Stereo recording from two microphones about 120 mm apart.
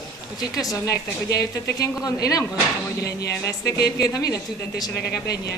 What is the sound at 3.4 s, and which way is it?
Speech, 25° left (ahead or behind).